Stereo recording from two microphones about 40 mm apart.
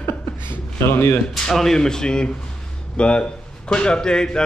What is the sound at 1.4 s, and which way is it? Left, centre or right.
Speech, centre.